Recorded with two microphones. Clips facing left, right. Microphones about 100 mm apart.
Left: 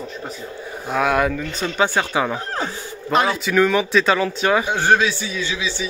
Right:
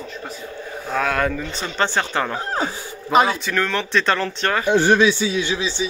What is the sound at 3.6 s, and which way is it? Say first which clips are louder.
Speech: left 6 dB; 10° left (ahead or behind).